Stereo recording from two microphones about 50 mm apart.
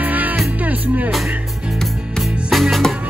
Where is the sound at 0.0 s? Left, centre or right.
Right.